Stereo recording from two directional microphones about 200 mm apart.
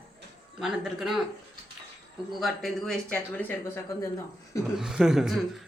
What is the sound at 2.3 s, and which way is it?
Speech, centre (ahead or behind).